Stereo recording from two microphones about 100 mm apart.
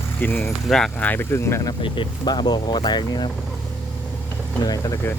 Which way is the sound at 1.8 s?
60° left (ahead or behind).